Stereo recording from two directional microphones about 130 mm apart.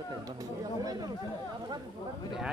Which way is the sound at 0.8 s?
30° right (ahead or behind).